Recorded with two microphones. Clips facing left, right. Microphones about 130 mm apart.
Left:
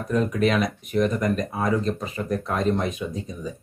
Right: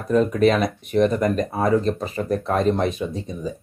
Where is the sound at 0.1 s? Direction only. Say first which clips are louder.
Right 5 dB; 35° right (ahead or behind).